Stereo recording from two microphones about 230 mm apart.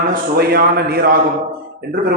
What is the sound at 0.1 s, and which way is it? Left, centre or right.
A man's voice, right.